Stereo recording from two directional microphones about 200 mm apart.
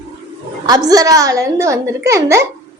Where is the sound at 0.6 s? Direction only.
20° right (ahead or behind).